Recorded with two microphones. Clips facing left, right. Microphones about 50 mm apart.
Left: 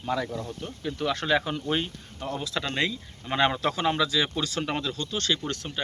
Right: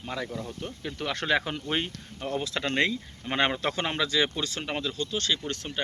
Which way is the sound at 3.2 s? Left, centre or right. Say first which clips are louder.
Left 2 dB; right.